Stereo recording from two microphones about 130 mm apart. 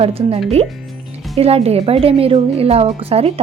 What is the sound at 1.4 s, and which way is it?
A woman's voice, 50° right (ahead or behind).